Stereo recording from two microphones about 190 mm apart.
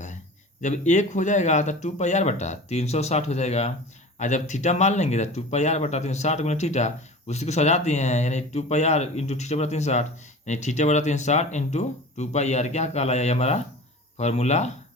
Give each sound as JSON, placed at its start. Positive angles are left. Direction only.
{"t": 0.6, "sound": "speech", "side_deg": 40}